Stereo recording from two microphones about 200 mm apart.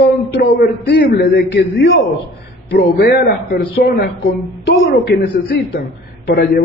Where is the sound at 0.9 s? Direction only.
55° left (ahead or behind).